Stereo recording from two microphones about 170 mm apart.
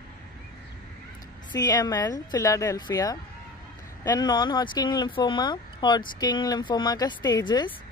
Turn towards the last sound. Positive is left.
turn(degrees=25)  # may be behind; listen again after turning